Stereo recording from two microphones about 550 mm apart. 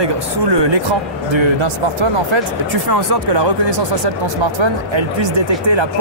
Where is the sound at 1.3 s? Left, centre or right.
Right.